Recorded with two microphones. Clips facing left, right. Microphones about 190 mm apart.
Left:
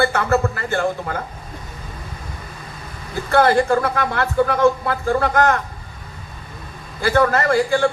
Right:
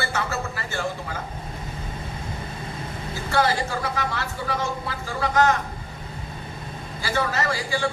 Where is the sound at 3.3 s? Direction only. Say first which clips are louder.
Left 8 dB; 55° left (ahead or behind).